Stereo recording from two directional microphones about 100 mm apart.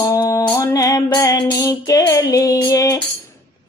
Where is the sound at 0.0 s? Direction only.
35° left (ahead or behind).